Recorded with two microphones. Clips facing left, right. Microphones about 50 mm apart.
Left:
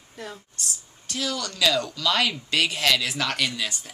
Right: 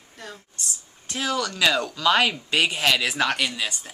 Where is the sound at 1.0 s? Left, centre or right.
Right.